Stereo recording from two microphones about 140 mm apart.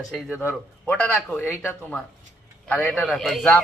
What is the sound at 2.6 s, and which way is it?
Speech, 10° left (ahead or behind).